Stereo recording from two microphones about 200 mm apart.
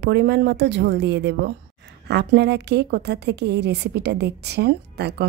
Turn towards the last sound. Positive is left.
turn(degrees=-55)  # may be behind; listen again after turning